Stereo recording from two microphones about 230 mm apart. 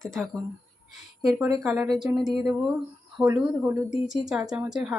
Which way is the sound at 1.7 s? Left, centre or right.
Centre.